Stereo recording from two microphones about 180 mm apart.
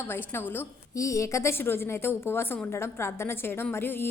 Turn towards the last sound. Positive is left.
turn(degrees=10)  # may be behind; listen again after turning